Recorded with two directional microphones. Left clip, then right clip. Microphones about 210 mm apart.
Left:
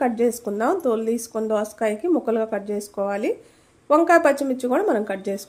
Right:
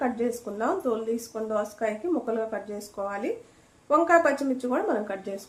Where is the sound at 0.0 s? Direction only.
45° left (ahead or behind).